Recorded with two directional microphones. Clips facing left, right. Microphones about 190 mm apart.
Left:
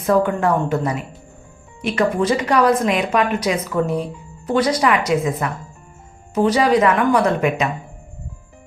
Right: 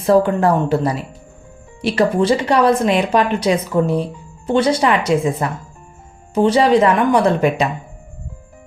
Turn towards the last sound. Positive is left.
turn(degrees=-35)  # may be behind; listen again after turning